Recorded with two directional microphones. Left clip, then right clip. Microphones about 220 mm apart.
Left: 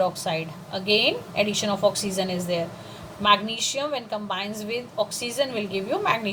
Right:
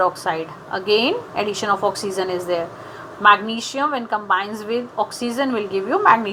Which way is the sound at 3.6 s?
15° right (ahead or behind).